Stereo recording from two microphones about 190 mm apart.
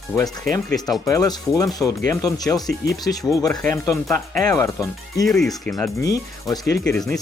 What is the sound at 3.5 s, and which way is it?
Speech, 5° left (ahead or behind).